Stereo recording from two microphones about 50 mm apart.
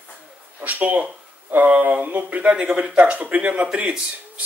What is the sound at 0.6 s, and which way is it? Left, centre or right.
Speech, right.